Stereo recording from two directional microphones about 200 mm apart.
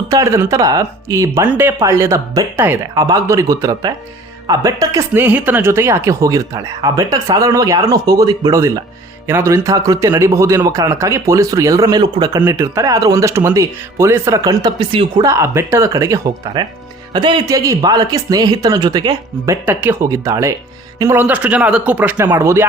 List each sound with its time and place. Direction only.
0.1 s speech: 15° right (ahead or behind)